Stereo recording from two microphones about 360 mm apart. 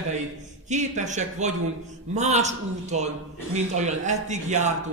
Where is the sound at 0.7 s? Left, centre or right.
Centre.